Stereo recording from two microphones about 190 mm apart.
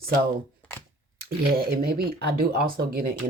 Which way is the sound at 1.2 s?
55° right (ahead or behind).